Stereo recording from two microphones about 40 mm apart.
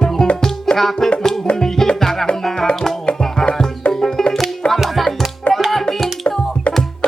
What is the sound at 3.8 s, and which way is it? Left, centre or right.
Music, left.